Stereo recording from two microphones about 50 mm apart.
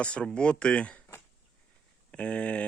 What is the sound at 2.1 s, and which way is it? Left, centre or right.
Speech, left.